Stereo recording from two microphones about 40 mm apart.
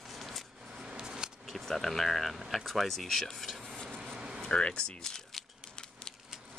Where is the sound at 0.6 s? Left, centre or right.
Centre.